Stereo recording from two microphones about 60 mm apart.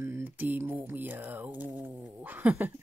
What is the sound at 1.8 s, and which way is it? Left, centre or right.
Cat, right.